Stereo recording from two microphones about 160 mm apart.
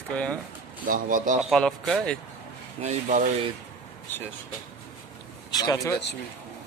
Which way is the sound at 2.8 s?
50° right (ahead or behind).